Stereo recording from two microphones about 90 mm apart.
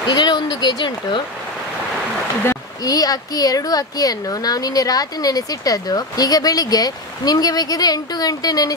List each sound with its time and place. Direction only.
0.1 s speech: 50° left (ahead or behind)
2.4 s speech: 40° left (ahead or behind)